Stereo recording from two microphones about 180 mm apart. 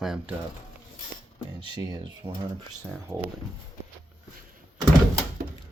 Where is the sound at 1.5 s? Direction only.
25° right (ahead or behind).